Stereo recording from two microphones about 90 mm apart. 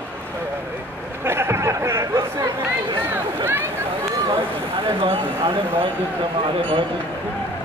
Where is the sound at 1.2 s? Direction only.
25° right (ahead or behind).